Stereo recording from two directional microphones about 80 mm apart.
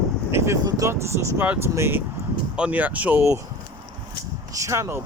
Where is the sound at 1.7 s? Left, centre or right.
Right.